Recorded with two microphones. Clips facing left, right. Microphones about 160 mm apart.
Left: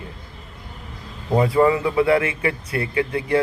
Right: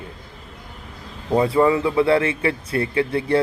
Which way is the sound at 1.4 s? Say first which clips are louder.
Even; 25° right (ahead or behind).